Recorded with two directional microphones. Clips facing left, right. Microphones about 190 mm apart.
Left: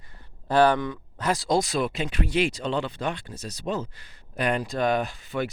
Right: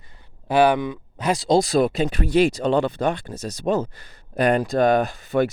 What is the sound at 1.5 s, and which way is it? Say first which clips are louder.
Speech: right 10 dB; 35° right (ahead or behind).